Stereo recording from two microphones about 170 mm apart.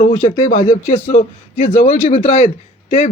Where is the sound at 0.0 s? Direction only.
50° left (ahead or behind).